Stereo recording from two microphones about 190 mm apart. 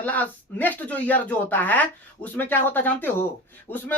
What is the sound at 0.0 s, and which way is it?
Speech, 10° left (ahead or behind).